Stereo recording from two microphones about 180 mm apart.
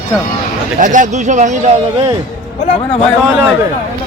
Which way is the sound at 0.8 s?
45° right (ahead or behind).